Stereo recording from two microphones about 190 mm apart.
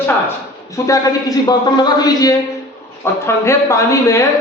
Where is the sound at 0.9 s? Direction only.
20° left (ahead or behind).